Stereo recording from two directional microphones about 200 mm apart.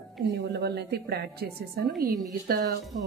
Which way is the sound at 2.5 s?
50° right (ahead or behind).